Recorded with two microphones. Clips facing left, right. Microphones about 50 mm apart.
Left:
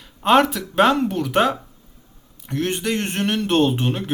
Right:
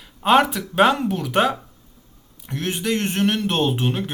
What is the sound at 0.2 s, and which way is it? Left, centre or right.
Speech, centre.